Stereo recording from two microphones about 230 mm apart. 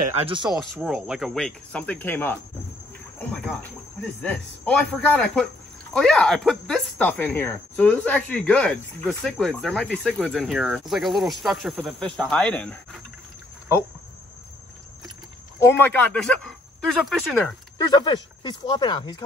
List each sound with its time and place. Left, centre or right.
0.2 s speech: right
0.5 s speech: centre
3.2 s a sound: centre
4.2 s speech: centre
15.6 s speech: centre
17.8 s speech: centre